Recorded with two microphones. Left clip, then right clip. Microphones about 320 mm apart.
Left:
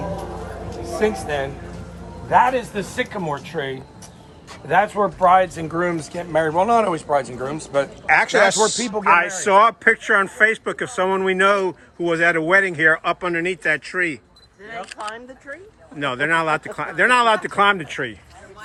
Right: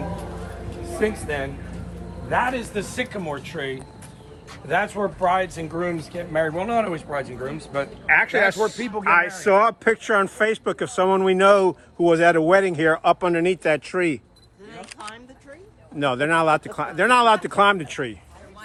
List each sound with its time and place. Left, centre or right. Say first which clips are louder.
0.9 s speech: left 3 dB; left
8.0 s speech: left 1 dB; centre
8.5 s speech: left 4 dB; left
9.0 s a man's voice: left 2 dB; centre
16.0 s speech: even; centre